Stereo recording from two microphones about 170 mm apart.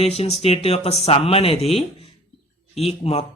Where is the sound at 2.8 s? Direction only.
35° left (ahead or behind).